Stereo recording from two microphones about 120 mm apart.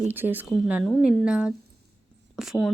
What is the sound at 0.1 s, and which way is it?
Speech, 15° right (ahead or behind).